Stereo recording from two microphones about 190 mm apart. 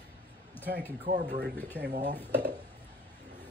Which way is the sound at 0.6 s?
10° left (ahead or behind).